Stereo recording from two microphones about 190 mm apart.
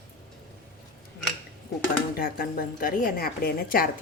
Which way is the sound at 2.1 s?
50° left (ahead or behind).